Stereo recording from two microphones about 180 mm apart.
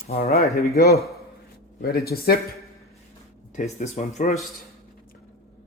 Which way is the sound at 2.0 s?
55° left (ahead or behind).